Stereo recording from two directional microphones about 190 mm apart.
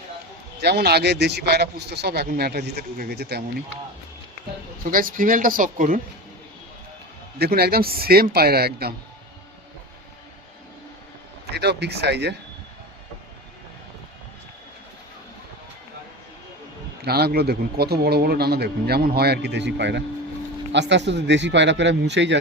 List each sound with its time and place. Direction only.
0.6 s speech: 60° right (ahead or behind)
4.8 s a man's voice: 50° right (ahead or behind)
7.3 s a man's voice: 55° right (ahead or behind)
11.5 s speech: 60° right (ahead or behind)
17.0 s a man's voice: 55° right (ahead or behind)